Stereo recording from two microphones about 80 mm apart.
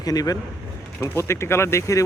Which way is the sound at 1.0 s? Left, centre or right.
Left.